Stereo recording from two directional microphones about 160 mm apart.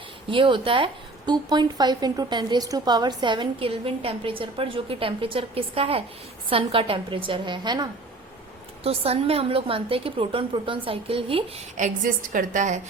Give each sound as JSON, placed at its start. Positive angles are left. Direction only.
{"t": 0.3, "sound": "a woman's voice", "side_deg": -30}
{"t": 8.8, "sound": "a woman's voice", "side_deg": -40}
{"t": 11.8, "sound": "a woman's voice", "side_deg": -55}